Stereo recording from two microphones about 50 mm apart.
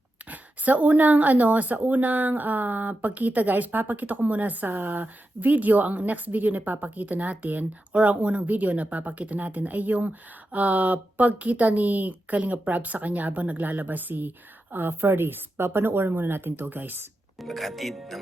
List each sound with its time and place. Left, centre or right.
0.3 s a woman's voice: right
17.4 s speech: centre